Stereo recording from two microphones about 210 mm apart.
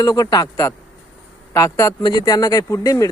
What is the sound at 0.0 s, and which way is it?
Speech, 15° left (ahead or behind).